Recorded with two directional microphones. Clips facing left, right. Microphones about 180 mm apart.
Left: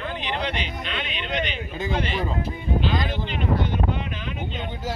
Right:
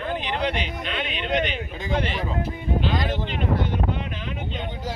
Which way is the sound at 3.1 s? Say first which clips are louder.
Right 1 dB; 45° right (ahead or behind).